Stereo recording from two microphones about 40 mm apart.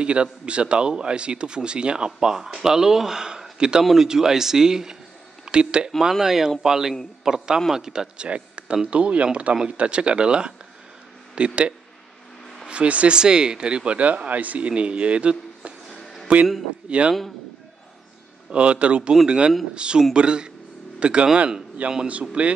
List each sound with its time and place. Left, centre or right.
0.0 s speech: right
3.8 s speech: centre; by 5.9 s right
6.1 s speech: centre
8.3 s a sound: right
8.9 s speech: right
13.1 s speech: right
13.9 s a man's voice: right
15.9 s a sound: centre
16.9 s speech: right
18.5 s speech: right